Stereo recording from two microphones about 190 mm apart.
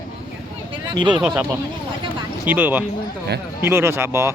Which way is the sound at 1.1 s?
10° right (ahead or behind).